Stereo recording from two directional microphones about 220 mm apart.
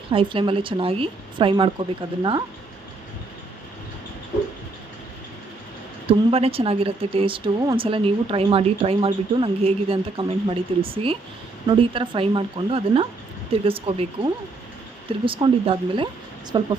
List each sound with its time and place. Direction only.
0.1 s a woman's voice: 25° right (ahead or behind)
6.1 s a woman's voice: 25° right (ahead or behind)